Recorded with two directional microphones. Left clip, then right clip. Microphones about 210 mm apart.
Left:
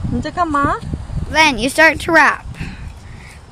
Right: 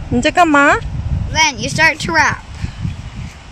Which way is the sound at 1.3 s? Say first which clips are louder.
Left 2 dB; 55° left (ahead or behind).